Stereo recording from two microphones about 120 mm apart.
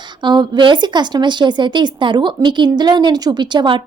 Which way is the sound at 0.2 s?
40° right (ahead or behind).